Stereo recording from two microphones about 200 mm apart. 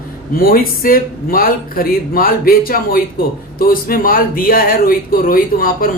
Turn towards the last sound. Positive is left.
turn(degrees=45)  # may be behind; listen again after turning